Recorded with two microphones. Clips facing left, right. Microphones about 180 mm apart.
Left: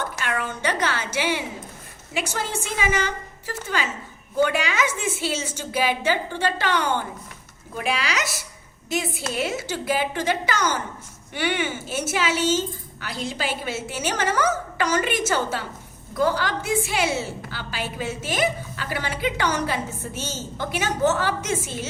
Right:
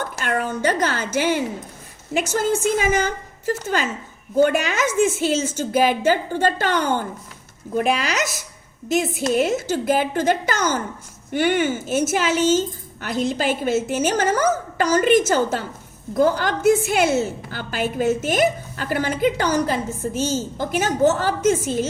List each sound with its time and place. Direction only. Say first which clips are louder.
0.2 s a woman's voice: right 8 dB; 45° right (ahead or behind)